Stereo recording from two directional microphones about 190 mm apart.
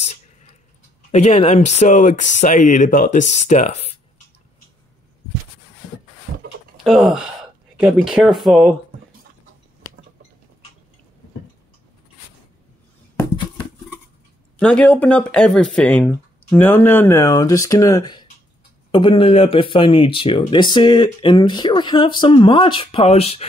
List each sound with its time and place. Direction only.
1.1 s speech: 35° left (ahead or behind)
6.3 s a sound: 50° right (ahead or behind)
6.8 s speech: centre (ahead or behind)
14.6 s speech: 5° left (ahead or behind); by 23.4 s 30° left (ahead or behind)